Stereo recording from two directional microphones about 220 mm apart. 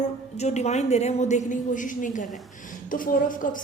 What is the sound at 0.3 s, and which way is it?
Speech, 30° left (ahead or behind).